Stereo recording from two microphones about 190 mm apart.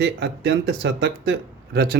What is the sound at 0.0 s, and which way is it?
Speech, 65° right (ahead or behind).